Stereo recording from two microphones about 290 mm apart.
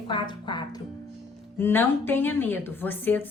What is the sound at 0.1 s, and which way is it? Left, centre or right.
A woman's voice, centre.